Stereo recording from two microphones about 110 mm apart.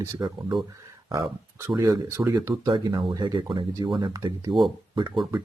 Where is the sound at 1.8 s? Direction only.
30° right (ahead or behind).